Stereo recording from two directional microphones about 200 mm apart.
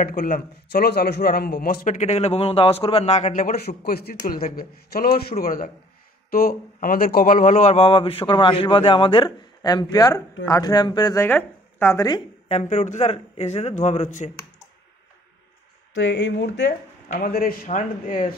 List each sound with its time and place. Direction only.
0.0 s a man's voice: 45° left (ahead or behind); by 12.2 s 15° left (ahead or behind)
12.4 s a man's voice: 30° left (ahead or behind)
15.9 s speech: 70° left (ahead or behind)
17.1 s a man's voice: 45° left (ahead or behind)